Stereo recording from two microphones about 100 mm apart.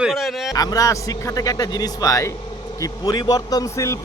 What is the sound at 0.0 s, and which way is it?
Speech, centre (ahead or behind).